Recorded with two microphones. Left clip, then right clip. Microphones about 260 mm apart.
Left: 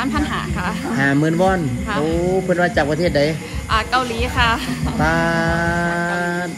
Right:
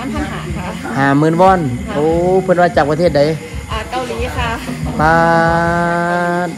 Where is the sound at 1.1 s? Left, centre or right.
Right.